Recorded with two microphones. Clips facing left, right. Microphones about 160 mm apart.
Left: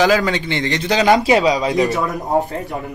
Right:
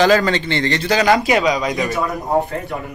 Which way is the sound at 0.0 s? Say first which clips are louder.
Right 1 dB; 10° left (ahead or behind).